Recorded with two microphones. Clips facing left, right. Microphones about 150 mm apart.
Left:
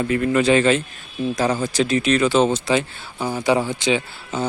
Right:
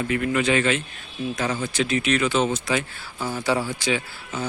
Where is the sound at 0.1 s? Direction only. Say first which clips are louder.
Left 5 dB; 35° left (ahead or behind).